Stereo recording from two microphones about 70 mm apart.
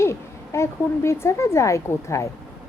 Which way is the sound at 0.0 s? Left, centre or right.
Left.